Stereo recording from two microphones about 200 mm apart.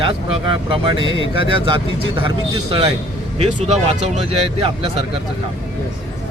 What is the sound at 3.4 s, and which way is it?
Speech, 35° right (ahead or behind).